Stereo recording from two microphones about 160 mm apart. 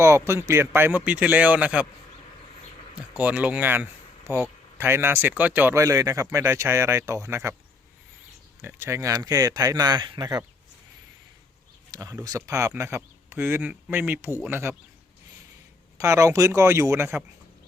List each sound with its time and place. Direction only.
0.0 s speech: 15° right (ahead or behind)
3.2 s speech: 10° right (ahead or behind)
8.6 s speech: 15° right (ahead or behind)
11.9 s speech: 20° right (ahead or behind)
16.0 s speech: 20° right (ahead or behind)